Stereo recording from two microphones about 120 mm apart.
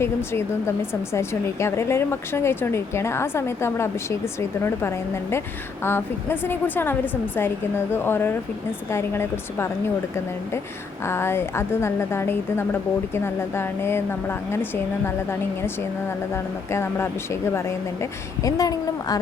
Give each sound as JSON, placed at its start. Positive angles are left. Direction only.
{"t": 0.0, "sound": "a woman's voice", "side_deg": 20}
{"t": 11.0, "sound": "a woman's voice", "side_deg": 20}